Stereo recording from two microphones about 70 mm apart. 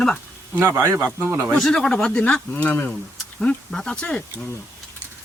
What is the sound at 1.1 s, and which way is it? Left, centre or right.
Speech, right.